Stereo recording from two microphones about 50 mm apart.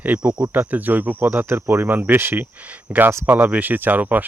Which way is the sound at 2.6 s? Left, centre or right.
Right.